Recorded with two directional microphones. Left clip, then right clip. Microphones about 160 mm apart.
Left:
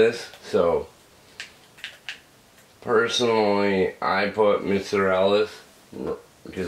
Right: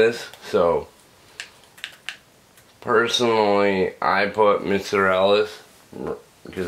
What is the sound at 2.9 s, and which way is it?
Speech, 25° right (ahead or behind).